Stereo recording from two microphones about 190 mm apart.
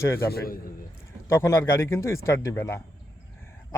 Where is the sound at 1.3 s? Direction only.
15° left (ahead or behind).